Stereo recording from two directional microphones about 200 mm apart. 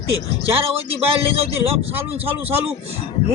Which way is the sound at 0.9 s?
30° right (ahead or behind).